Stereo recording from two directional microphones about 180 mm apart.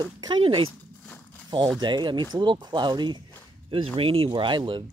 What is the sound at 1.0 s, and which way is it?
Walk, 10° left (ahead or behind).